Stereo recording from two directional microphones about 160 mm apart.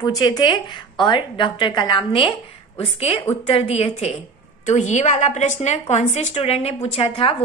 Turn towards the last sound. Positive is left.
turn(degrees=35)  # may be behind; listen again after turning